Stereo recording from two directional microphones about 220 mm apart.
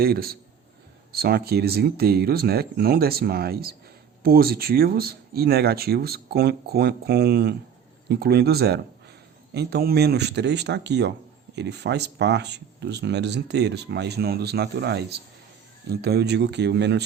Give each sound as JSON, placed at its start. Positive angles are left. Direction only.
{"t": 0.0, "sound": "speech", "side_deg": -45}